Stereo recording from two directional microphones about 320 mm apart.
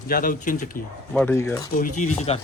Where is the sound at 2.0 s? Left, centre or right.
Left.